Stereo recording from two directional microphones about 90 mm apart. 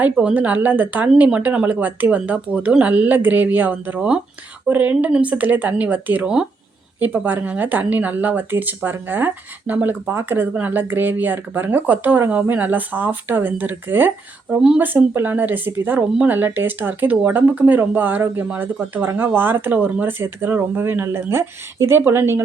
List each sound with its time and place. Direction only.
0.0 s speech: 15° right (ahead or behind)
7.0 s speech: 20° right (ahead or behind)